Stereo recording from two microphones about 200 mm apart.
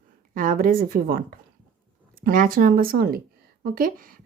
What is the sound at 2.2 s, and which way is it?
A woman's voice, 45° right (ahead or behind).